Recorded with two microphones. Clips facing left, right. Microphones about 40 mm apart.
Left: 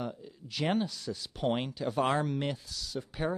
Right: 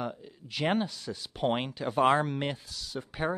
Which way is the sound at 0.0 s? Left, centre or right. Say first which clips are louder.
Right 2 dB; right.